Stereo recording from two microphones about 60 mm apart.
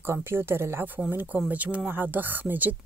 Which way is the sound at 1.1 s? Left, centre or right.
Right.